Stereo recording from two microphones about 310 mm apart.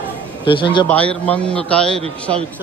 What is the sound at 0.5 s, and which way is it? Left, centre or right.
Speech, centre.